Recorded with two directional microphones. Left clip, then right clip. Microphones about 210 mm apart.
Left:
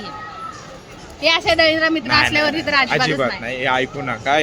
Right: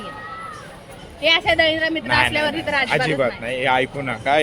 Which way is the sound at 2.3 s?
35° left (ahead or behind).